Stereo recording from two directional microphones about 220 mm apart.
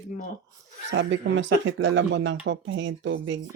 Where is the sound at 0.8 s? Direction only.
55° right (ahead or behind).